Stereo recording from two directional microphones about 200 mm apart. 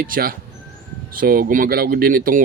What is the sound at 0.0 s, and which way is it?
Speech, 50° right (ahead or behind).